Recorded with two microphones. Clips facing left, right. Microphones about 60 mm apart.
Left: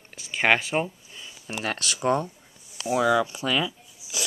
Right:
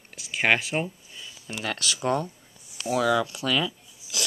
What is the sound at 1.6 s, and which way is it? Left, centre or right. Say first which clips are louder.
Speech: left 1 dB; left.